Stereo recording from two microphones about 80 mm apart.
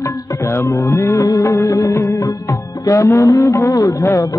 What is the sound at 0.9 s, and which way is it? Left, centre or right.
Music, left.